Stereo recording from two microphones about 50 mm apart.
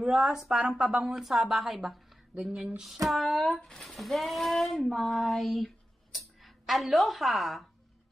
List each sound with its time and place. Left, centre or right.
0.0 s speech: centre
0.5 s speech: right
0.9 s a woman's voice: centre
2.8 s a woman's voice: centre